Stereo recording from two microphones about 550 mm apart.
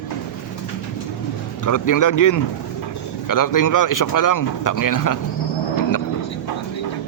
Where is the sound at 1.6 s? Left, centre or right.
Left.